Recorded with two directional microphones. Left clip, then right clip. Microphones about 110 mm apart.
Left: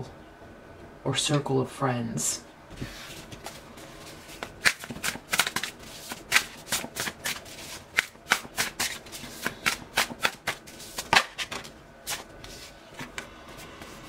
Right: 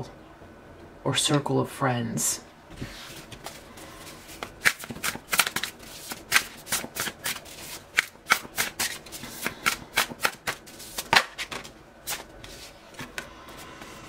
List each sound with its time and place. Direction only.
1.0 s speech: 30° right (ahead or behind)
4.4 s shuffling cards: 15° right (ahead or behind)
12.9 s a sound: 20° right (ahead or behind)